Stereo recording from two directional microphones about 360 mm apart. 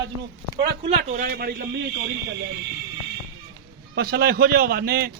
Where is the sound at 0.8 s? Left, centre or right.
Right.